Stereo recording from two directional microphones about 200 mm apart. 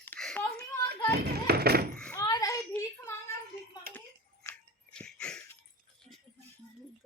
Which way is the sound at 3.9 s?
50° right (ahead or behind).